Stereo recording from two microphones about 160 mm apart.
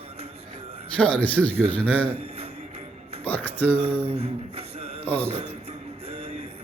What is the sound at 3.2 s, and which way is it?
Speech, 10° left (ahead or behind).